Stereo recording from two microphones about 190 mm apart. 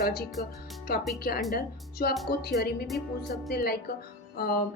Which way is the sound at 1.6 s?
55° left (ahead or behind).